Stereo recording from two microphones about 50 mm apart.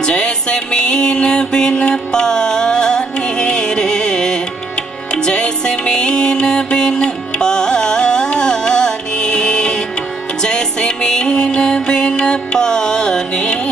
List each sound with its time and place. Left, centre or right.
0.0 s music: centre